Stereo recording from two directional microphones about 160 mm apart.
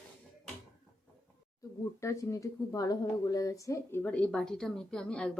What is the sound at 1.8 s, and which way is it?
Speech, 20° left (ahead or behind).